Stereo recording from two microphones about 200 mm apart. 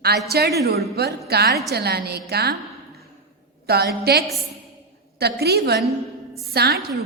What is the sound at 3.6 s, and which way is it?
A woman's voice, 50° right (ahead or behind).